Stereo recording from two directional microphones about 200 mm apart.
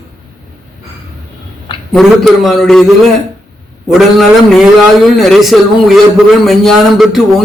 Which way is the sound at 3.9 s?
Centre (ahead or behind).